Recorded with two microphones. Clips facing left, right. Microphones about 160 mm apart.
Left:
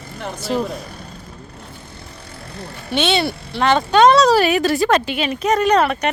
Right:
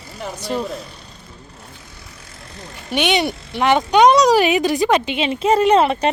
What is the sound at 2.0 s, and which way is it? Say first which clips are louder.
Vehicle: left 5 dB; 60° left (ahead or behind).